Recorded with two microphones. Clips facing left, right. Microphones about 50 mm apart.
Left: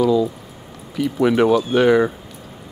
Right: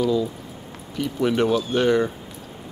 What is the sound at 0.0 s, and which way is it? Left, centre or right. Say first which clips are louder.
Speech: left 5 dB; centre.